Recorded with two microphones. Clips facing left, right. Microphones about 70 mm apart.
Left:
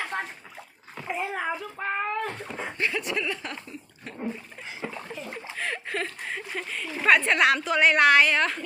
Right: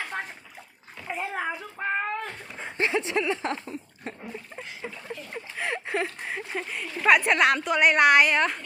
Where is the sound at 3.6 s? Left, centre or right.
Right.